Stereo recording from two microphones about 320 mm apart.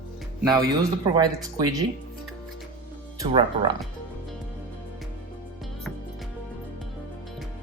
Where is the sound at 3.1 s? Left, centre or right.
Centre.